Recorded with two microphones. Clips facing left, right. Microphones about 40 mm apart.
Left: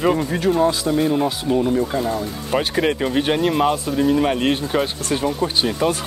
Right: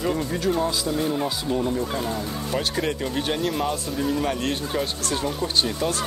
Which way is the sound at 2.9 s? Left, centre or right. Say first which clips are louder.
Left 7 dB; left.